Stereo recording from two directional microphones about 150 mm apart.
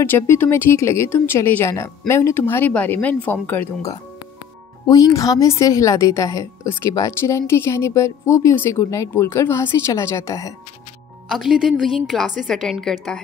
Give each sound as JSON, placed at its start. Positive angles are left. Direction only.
{"t": 0.0, "sound": "a woman's voice", "side_deg": 15}
{"t": 4.8, "sound": "a woman's voice", "side_deg": 25}
{"t": 11.2, "sound": "a woman's voice", "side_deg": -5}